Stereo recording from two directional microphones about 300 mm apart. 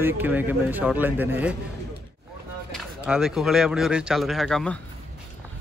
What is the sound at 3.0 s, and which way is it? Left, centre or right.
Speech, centre.